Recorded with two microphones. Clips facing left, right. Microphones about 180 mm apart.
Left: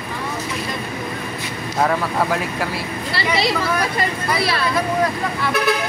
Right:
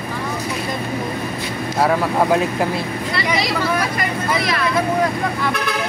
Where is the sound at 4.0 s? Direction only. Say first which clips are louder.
Even; 30° left (ahead or behind).